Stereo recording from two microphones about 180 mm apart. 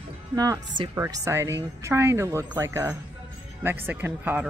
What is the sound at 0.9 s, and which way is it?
Speech, 15° right (ahead or behind).